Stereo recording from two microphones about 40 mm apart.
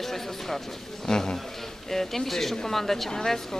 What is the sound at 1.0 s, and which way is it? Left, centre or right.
Speech, centre.